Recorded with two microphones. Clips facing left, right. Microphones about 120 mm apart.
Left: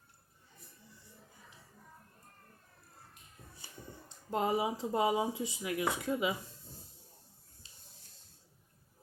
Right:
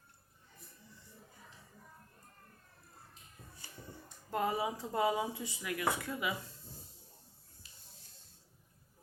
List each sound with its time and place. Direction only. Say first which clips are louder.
4.3 s speech: left 2 dB; 20° left (ahead or behind)